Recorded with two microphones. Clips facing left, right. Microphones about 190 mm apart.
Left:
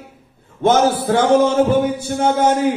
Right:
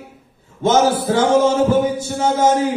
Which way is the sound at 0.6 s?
55° left (ahead or behind).